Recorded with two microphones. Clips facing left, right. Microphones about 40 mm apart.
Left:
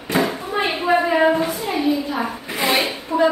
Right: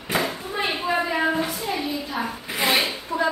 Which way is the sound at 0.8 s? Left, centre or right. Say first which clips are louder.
Left 8 dB; centre.